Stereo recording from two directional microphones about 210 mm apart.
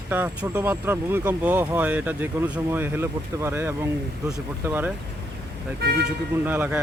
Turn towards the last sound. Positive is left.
turn(degrees=-10)  # may be behind; listen again after turning